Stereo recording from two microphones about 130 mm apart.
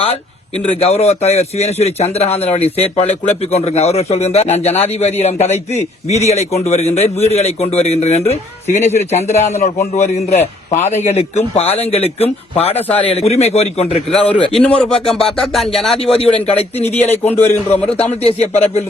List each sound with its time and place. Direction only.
0.8 s a man's voice: 55° left (ahead or behind)
14.2 s a man's voice: 10° left (ahead or behind)
16.0 s a man's voice: 50° left (ahead or behind)
17.1 s a man's voice: 15° left (ahead or behind)
18.1 s a man's voice: 55° left (ahead or behind)